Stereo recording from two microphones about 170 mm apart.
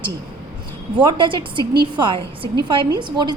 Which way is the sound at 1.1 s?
30° right (ahead or behind).